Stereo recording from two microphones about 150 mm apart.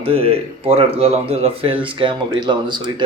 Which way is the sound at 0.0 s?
40° right (ahead or behind).